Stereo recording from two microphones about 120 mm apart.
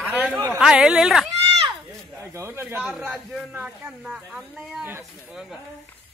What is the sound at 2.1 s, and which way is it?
Speech, 20° right (ahead or behind).